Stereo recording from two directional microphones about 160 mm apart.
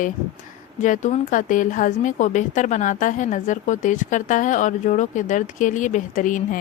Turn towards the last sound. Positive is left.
turn(degrees=55)  # may be behind; listen again after turning